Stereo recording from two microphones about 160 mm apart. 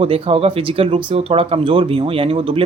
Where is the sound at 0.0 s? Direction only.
40° right (ahead or behind).